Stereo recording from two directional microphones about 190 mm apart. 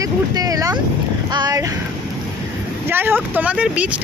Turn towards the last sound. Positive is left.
turn(degrees=-5)  # may be behind; listen again after turning